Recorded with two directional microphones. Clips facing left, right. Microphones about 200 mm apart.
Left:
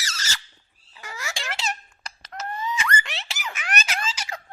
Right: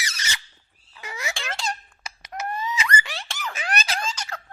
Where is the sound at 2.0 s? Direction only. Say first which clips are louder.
Right 3 dB; 15° right (ahead or behind).